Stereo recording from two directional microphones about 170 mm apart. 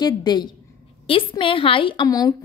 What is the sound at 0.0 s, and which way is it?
A woman's voice, 25° left (ahead or behind).